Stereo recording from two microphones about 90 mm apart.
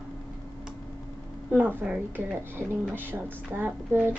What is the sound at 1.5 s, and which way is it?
Speech, 10° right (ahead or behind).